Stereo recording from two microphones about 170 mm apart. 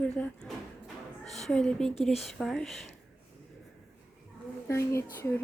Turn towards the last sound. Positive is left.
turn(degrees=15)  # may be behind; listen again after turning